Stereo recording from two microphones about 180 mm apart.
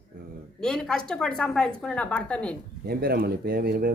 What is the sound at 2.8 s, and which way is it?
Speech, 55° right (ahead or behind).